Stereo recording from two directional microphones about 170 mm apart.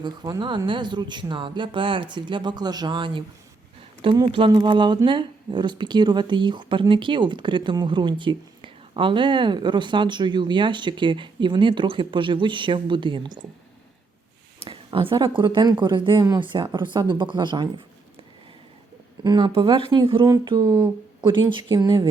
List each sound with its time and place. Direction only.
0.0 s speech: 25° right (ahead or behind)
14.6 s speech: 30° right (ahead or behind)
19.2 s speech: 25° right (ahead or behind)